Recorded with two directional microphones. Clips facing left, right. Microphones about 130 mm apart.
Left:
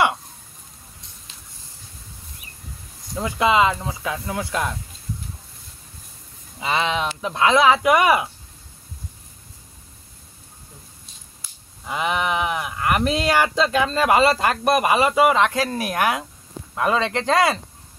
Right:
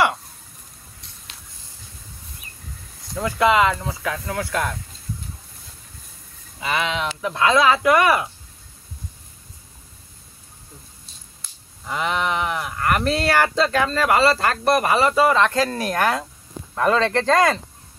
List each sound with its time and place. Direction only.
3.2 s speech: 20° left (ahead or behind)
6.6 s speech: 25° left (ahead or behind)
11.4 s whip: 5° left (ahead or behind)
11.9 s speech: 15° left (ahead or behind)